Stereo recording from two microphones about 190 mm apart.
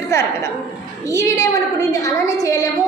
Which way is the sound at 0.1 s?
15° left (ahead or behind).